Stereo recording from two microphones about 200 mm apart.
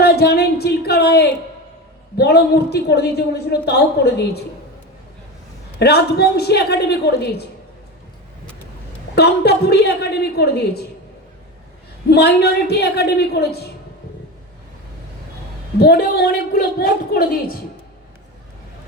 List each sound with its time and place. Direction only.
0.0 s a sound: 50° left (ahead or behind)
2.1 s a woman's voice: 55° left (ahead or behind)
5.8 s a woman's voice: 55° left (ahead or behind)
9.1 s a woman's voice: 55° left (ahead or behind)
12.1 s a woman's voice: 55° left (ahead or behind)
15.8 s a woman's voice: 50° left (ahead or behind)